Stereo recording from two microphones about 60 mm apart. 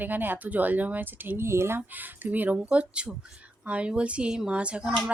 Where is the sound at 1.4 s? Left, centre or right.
Right.